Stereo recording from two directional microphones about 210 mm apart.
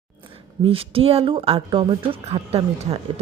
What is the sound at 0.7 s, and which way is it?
Speech, 25° right (ahead or behind).